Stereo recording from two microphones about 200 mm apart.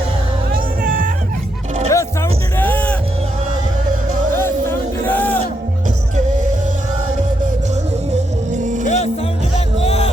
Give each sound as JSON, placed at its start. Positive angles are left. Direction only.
{"t": 0.5, "sound": "music", "side_deg": -45}
{"t": 1.9, "sound": "music", "side_deg": 15}
{"t": 4.4, "sound": "music", "side_deg": 10}
{"t": 8.1, "sound": "music", "side_deg": -35}
{"t": 9.8, "sound": "music", "side_deg": 30}